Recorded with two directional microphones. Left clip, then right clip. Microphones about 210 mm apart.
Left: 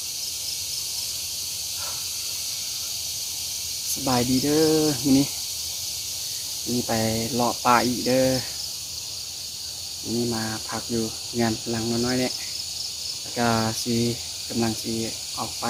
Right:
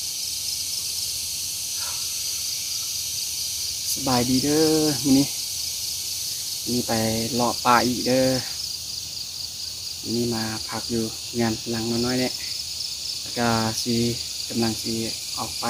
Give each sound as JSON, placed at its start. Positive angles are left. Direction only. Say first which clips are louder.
{"t": 4.0, "sound": "cricket", "louder": "right 1 dB", "side_deg": 0}
{"t": 6.8, "sound": "cricket", "louder": "even", "side_deg": 0}
{"t": 10.9, "sound": "cricket", "louder": "even", "side_deg": 0}
{"t": 13.3, "sound": "cricket", "louder": "even", "side_deg": 0}